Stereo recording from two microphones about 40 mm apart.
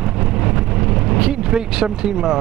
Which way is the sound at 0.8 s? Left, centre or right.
Centre.